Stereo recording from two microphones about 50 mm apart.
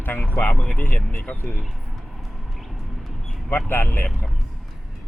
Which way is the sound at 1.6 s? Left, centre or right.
Centre.